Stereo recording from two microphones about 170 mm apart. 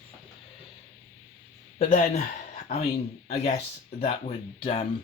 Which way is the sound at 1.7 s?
45° left (ahead or behind).